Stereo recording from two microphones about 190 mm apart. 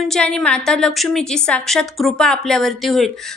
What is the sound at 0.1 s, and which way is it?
A woman's voice, 5° left (ahead or behind).